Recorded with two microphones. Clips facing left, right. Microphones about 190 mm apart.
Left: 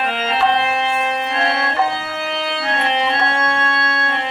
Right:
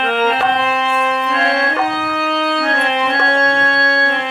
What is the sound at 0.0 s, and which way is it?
Organ, 60° right (ahead or behind).